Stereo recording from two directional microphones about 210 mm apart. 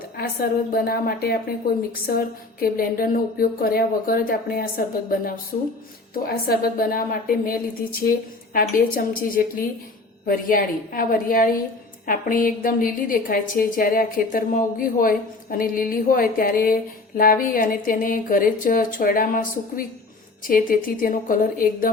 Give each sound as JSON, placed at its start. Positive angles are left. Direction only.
{"t": 0.2, "sound": "a woman's voice", "side_deg": 45}
{"t": 6.2, "sound": "a woman's voice", "side_deg": 45}